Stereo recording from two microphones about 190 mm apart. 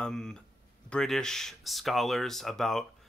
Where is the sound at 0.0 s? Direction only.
5° left (ahead or behind).